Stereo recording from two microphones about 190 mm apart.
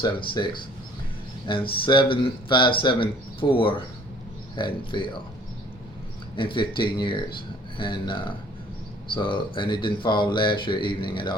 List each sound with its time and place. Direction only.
0.0 s speech: 25° left (ahead or behind)
6.3 s speech: 25° left (ahead or behind)